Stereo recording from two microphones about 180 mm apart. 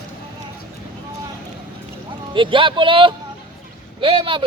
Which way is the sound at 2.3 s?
25° right (ahead or behind).